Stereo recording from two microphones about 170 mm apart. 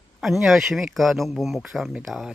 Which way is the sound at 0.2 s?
Centre (ahead or behind).